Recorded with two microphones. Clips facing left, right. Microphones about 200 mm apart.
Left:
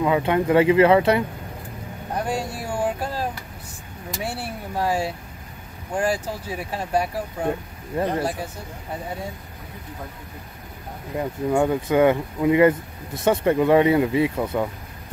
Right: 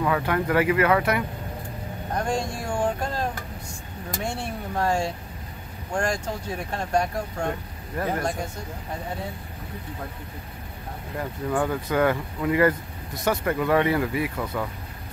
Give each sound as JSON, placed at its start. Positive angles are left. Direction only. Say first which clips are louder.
{"t": 0.0, "sound": "speech", "louder": "left 4 dB", "side_deg": 20}
{"t": 2.1, "sound": "speech", "louder": "even", "side_deg": 10}
{"t": 2.5, "sound": "a sound", "louder": "left 1 dB", "side_deg": 10}
{"t": 4.2, "sound": "speech", "louder": "left 1 dB", "side_deg": 5}
{"t": 11.1, "sound": "speech", "louder": "left 5 dB", "side_deg": 20}